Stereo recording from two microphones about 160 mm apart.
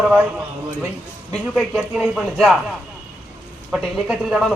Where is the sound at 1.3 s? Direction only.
Centre (ahead or behind).